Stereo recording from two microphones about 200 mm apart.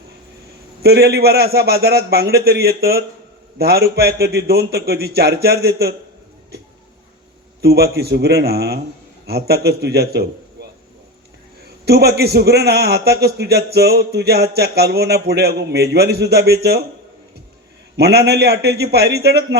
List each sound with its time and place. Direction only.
0.8 s a man's voice: 55° right (ahead or behind)
7.6 s a man's voice: 50° right (ahead or behind)
11.9 s a man's voice: 55° right (ahead or behind)
17.9 s a man's voice: 55° right (ahead or behind)